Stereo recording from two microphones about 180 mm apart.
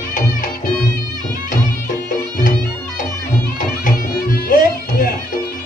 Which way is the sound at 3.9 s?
50° left (ahead or behind).